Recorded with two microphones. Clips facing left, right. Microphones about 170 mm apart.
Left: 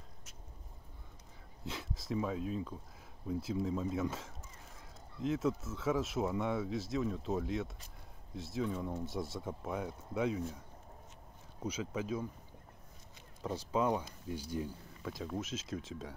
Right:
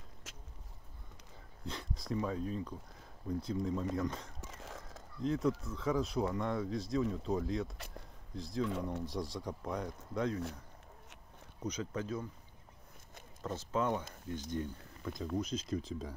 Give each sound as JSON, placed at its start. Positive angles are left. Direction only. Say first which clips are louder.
{"t": 1.6, "sound": "speech", "louder": "even", "side_deg": 0}
{"t": 4.4, "sound": "a sound", "louder": "right 7 dB", "side_deg": -90}
{"t": 5.2, "sound": "speech", "louder": "right 1 dB", "side_deg": 0}
{"t": 8.6, "sound": "speech", "louder": "right 1 dB", "side_deg": -85}
{"t": 9.0, "sound": "speech", "louder": "even", "side_deg": 5}
{"t": 11.6, "sound": "speech", "louder": "even", "side_deg": 10}
{"t": 13.4, "sound": "speech", "louder": "left 1 dB", "side_deg": 10}